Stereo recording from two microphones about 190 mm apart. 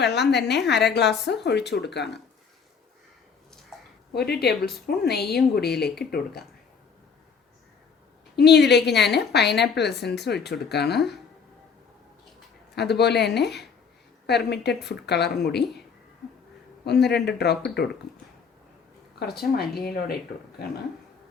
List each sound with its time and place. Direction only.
0.0 s a woman's voice: 60° left (ahead or behind)
4.1 s a woman's voice: 60° left (ahead or behind)
8.4 s a woman's voice: 60° left (ahead or behind)
12.7 s a woman's voice: 60° left (ahead or behind)
16.8 s a woman's voice: 60° left (ahead or behind)
19.2 s a woman's voice: 55° left (ahead or behind)